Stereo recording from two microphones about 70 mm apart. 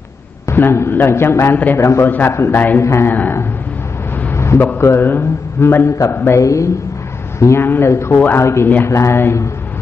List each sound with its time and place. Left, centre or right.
0.5 s a man's voice: left
2.0 s a man's voice: left
2.3 s a man's voice: left
3.1 s a man's voice: left
4.3 s a sound: left
4.7 s a man's voice: left
6.4 s a man's voice: left